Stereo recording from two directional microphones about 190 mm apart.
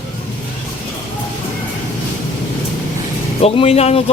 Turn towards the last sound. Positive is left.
turn(degrees=30)  # may be behind; listen again after turning